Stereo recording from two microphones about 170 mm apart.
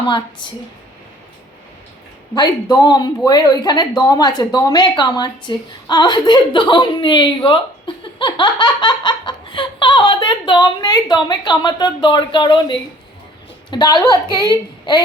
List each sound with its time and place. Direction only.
2.3 s speech: 25° left (ahead or behind)